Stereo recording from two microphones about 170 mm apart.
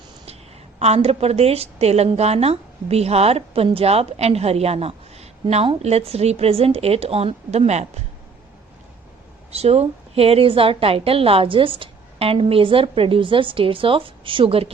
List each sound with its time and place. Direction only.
0.8 s a woman's voice: 40° right (ahead or behind)
9.5 s a woman's voice: 35° right (ahead or behind)